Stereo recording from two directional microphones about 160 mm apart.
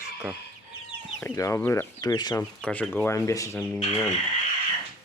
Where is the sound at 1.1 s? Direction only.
15° left (ahead or behind).